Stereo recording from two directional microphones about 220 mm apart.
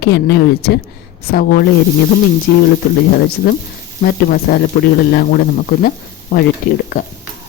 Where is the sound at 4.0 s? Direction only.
45° left (ahead or behind).